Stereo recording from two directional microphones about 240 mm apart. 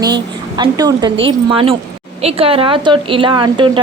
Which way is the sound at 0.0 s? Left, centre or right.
Centre.